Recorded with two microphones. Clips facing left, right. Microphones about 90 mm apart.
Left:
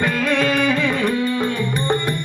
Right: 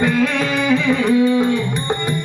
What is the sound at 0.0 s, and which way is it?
Music, 5° right (ahead or behind).